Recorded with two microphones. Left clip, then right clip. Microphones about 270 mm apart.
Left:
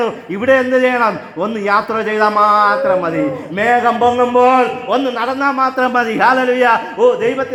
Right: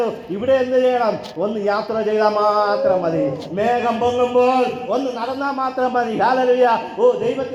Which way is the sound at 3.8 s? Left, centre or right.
Left.